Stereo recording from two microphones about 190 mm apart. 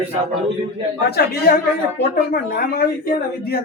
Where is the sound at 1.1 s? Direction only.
55° left (ahead or behind).